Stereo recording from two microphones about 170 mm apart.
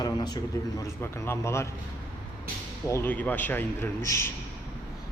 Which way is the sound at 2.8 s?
15° left (ahead or behind).